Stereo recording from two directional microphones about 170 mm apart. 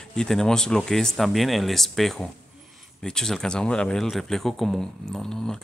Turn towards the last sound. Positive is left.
turn(degrees=5)  # may be behind; listen again after turning